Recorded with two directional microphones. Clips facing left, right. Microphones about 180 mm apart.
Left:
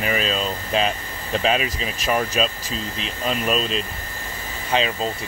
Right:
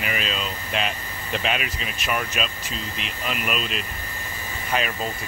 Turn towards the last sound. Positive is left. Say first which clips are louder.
# left 4 dB
turn(degrees=25)  # may be behind; listen again after turning